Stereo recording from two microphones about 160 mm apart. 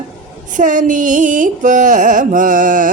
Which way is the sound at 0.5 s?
50° right (ahead or behind).